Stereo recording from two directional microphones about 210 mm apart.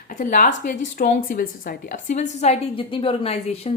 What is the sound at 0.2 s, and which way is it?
A woman's voice, 40° left (ahead or behind).